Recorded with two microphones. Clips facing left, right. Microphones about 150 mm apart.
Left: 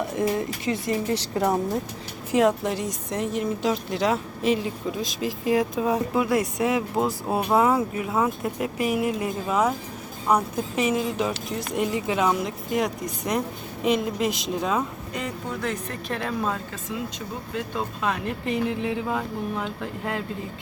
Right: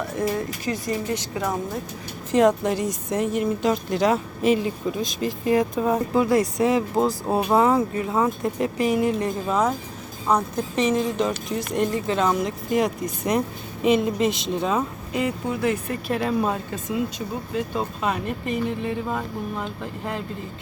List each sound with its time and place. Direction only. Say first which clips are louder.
0.0 s speech: left 1 dB; 20° left (ahead or behind)
2.3 s speech: right 2 dB; 5° left (ahead or behind)